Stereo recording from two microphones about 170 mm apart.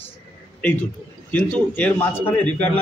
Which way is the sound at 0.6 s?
10° left (ahead or behind).